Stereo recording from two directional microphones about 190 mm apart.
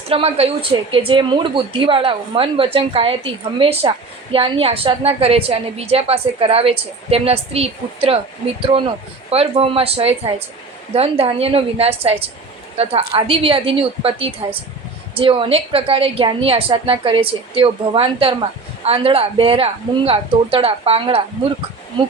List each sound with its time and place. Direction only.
0.1 s a woman's voice: 30° right (ahead or behind)
9.3 s a woman's voice: 30° right (ahead or behind)